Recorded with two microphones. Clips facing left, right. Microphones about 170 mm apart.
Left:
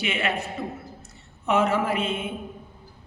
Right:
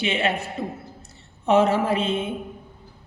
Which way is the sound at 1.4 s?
30° right (ahead or behind).